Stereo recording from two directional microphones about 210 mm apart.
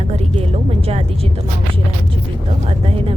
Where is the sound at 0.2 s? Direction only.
30° right (ahead or behind).